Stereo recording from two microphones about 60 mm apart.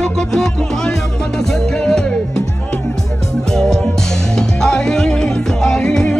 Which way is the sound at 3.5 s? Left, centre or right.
Centre.